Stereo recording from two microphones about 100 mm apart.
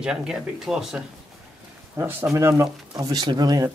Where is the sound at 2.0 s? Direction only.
25° right (ahead or behind).